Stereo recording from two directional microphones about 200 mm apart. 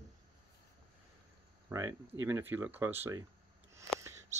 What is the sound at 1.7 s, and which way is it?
Speech, 10° right (ahead or behind).